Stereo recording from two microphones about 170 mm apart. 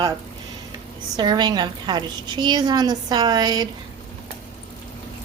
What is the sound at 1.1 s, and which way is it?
A woman's voice, 25° right (ahead or behind).